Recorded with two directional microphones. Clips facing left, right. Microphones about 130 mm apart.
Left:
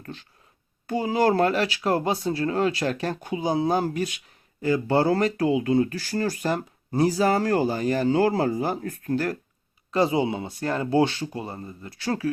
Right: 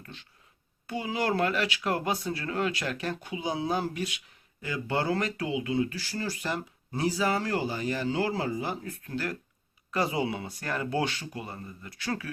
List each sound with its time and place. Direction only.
0.0 s speech: 40° left (ahead or behind)
9.9 s speech: 25° left (ahead or behind)